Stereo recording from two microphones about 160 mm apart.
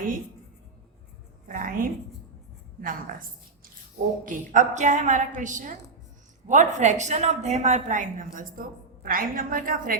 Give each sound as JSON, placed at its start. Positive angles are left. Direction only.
{"t": 1.5, "sound": "a sound", "side_deg": -60}
{"t": 2.8, "sound": "a woman's voice", "side_deg": -60}
{"t": 4.3, "sound": "a woman's voice", "side_deg": -50}